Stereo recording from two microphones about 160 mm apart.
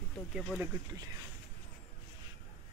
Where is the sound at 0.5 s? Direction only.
20° right (ahead or behind).